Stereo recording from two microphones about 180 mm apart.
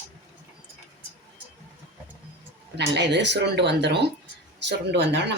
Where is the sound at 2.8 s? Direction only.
70° right (ahead or behind).